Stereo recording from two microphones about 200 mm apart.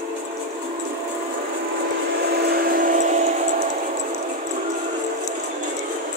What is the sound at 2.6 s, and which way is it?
Train, 45° right (ahead or behind).